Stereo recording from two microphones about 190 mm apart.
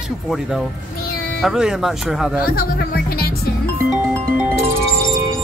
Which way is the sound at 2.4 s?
50° left (ahead or behind).